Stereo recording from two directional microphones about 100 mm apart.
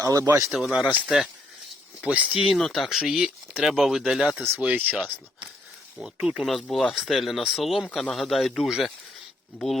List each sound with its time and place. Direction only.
0.0 s speech: 35° right (ahead or behind)
0.5 s speech: 5° right (ahead or behind)
2.0 s speech: 10° right (ahead or behind)
6.0 s speech: 10° right (ahead or behind)
6.4 s speech: centre (ahead or behind)